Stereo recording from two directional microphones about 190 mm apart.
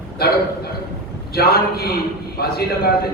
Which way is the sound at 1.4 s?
55° left (ahead or behind).